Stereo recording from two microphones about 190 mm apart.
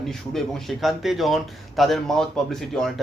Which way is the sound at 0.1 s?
Centre (ahead or behind).